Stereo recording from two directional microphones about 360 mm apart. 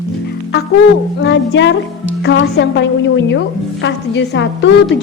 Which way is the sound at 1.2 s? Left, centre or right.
Left.